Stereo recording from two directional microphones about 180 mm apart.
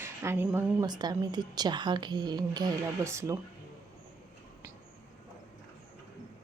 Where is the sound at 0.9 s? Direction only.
25° right (ahead or behind).